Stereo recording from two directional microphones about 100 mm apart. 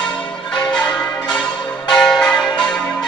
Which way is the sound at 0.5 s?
10° left (ahead or behind).